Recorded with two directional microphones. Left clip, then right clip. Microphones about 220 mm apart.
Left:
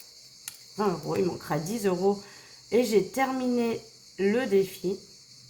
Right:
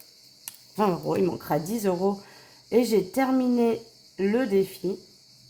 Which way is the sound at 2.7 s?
45° right (ahead or behind).